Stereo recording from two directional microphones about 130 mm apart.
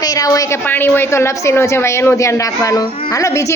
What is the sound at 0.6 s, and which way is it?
A woman's voice, 15° left (ahead or behind).